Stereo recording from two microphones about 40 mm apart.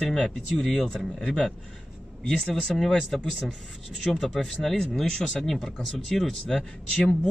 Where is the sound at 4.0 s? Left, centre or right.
Centre.